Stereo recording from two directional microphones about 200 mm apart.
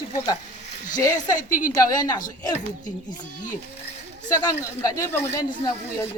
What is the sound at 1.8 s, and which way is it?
Speech, 15° left (ahead or behind).